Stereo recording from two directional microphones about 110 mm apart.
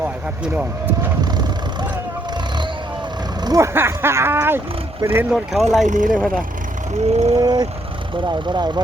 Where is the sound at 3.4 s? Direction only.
35° right (ahead or behind).